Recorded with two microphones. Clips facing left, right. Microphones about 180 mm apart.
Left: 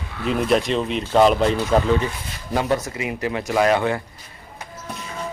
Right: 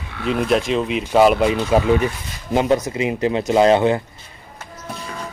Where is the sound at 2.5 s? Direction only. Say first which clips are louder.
Right 4 dB; 20° right (ahead or behind).